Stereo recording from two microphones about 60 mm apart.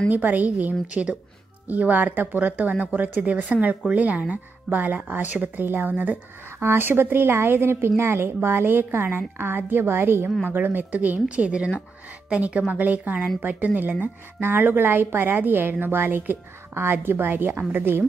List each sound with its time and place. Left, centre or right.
0.1 s speech: right
6.6 s a woman's voice: right